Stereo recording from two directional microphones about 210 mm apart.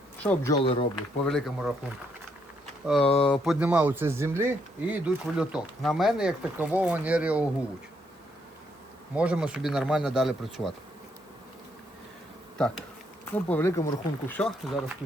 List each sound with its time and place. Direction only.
0.2 s speech: 10° left (ahead or behind)
0.5 s speech: 25° left (ahead or behind)
1.2 s speech: centre (ahead or behind)
3.0 s speech: 25° left (ahead or behind)
3.4 s speech: 5° right (ahead or behind)
9.1 s speech: 5° right (ahead or behind)
12.5 s bee: 5° left (ahead or behind)
13.3 s speech: 10° left (ahead or behind)